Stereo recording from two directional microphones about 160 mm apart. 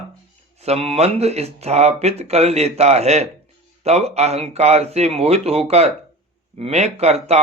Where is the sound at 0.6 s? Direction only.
40° right (ahead or behind).